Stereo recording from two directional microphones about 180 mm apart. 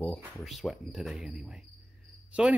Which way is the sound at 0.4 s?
Centre (ahead or behind).